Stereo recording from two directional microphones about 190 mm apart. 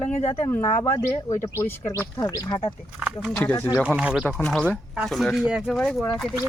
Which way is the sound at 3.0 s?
5° left (ahead or behind).